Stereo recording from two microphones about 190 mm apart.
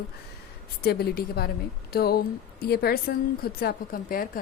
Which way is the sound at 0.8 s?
55° left (ahead or behind).